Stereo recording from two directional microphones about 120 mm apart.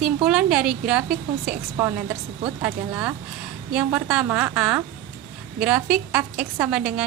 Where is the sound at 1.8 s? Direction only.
20° right (ahead or behind).